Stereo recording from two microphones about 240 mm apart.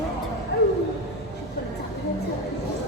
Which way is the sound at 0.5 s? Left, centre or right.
Left.